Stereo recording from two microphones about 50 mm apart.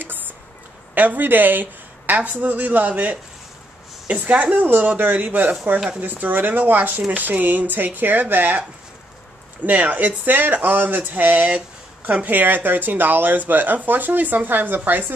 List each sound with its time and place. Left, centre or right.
0.9 s speech: right
9.7 s speech: right